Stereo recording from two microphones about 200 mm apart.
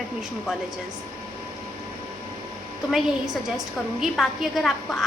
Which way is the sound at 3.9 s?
Centre (ahead or behind).